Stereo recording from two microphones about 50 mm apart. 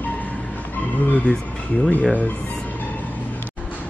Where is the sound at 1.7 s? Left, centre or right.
Left.